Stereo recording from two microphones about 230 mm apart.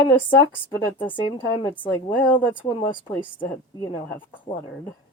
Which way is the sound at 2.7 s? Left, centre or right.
Left.